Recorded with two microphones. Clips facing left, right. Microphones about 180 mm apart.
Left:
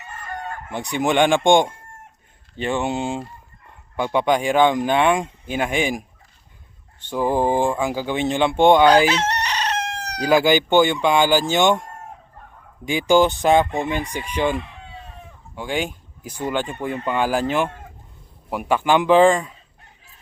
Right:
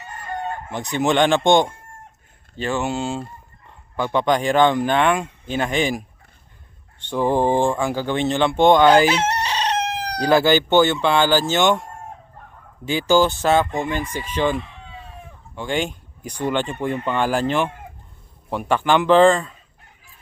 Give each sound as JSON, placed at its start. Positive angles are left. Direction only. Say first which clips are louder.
{"t": 0.3, "sound": "chicken", "louder": "right 4 dB", "side_deg": -25}
{"t": 0.7, "sound": "speech", "louder": "even", "side_deg": 10}
{"t": 2.6, "sound": "speech", "louder": "even", "side_deg": 20}
{"t": 7.1, "sound": "speech", "louder": "right 1 dB", "side_deg": 5}
{"t": 9.0, "sound": "chicken", "louder": "right 1 dB", "side_deg": -30}
{"t": 10.2, "sound": "speech", "louder": "even", "side_deg": 10}
{"t": 12.8, "sound": "speech", "louder": "left 1 dB", "side_deg": 15}
{"t": 15.5, "sound": "speech", "louder": "right 1 dB", "side_deg": 5}